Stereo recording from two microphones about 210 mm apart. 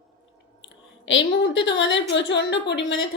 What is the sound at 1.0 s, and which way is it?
A woman's voice, 60° left (ahead or behind).